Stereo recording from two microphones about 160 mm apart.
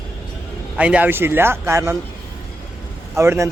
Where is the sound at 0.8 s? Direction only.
10° right (ahead or behind).